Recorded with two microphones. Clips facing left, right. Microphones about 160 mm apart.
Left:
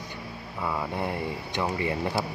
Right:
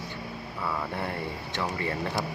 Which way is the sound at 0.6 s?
15° left (ahead or behind).